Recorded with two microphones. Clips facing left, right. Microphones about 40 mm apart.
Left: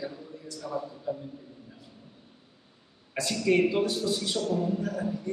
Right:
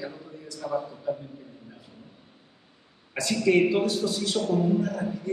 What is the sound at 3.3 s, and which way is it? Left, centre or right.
Speech, centre.